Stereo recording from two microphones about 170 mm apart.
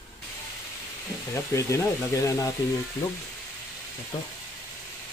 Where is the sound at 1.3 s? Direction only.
15° left (ahead or behind).